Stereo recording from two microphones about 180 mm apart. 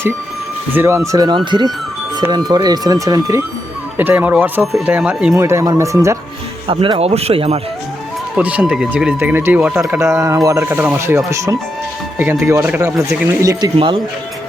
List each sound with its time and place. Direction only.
0.7 s speech: 15° right (ahead or behind)
6.7 s speech: 30° right (ahead or behind)
8.4 s speech: 10° right (ahead or behind)
12.2 s speech: 15° right (ahead or behind)
13.7 s speech: 30° right (ahead or behind)